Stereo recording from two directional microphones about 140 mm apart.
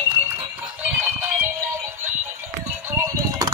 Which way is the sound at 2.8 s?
20° right (ahead or behind).